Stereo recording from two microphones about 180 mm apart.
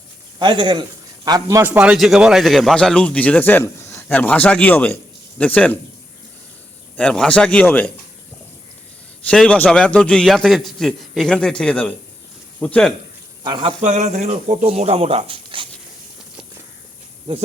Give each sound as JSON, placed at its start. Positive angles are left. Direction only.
{"t": 0.3, "sound": "a man's voice", "side_deg": -25}
{"t": 6.9, "sound": "a man's voice", "side_deg": 5}
{"t": 9.3, "sound": "a man's voice", "side_deg": 5}
{"t": 13.4, "sound": "speech", "side_deg": -25}